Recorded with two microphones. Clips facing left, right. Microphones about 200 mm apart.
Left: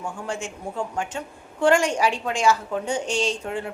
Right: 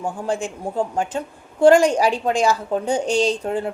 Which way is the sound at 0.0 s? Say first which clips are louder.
Right 6 dB; 35° right (ahead or behind).